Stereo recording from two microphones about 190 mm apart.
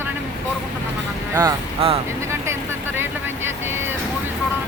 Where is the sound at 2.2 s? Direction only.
15° right (ahead or behind).